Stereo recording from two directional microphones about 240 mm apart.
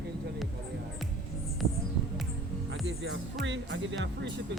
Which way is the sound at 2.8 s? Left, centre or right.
Right.